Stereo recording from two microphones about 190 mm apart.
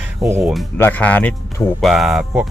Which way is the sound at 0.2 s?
15° right (ahead or behind).